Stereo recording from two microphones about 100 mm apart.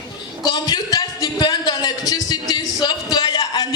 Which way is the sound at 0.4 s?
40° left (ahead or behind).